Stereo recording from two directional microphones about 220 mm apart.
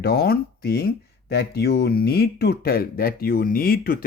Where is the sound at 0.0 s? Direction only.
45° left (ahead or behind).